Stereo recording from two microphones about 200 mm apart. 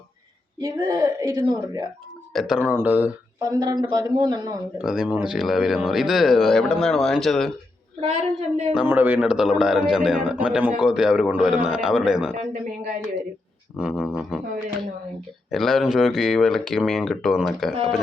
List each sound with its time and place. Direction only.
0.6 s a woman's voice: 15° right (ahead or behind)
2.3 s a man's voice: centre (ahead or behind); by 4.5 s 20° right (ahead or behind)
4.8 s a man's voice: 5° right (ahead or behind)
8.0 s a woman's voice: 35° right (ahead or behind)
8.7 s a man's voice: 5° right (ahead or behind)
13.7 s a man's voice: 5° right (ahead or behind)
15.4 s a man's voice: centre (ahead or behind)